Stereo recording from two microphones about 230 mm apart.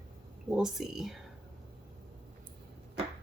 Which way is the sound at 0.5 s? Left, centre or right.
Centre.